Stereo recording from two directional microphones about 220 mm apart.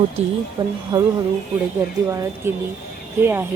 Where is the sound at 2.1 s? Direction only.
15° right (ahead or behind).